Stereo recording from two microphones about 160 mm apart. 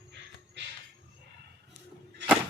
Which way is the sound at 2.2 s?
90° right.